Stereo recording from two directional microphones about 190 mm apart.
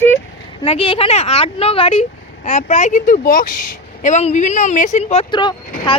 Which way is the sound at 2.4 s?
40° left (ahead or behind).